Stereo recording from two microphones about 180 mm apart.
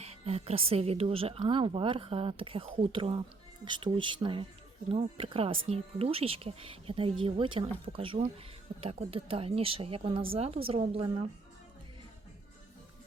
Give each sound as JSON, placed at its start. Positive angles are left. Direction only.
{"t": 0.0, "sound": "a woman's voice", "side_deg": -35}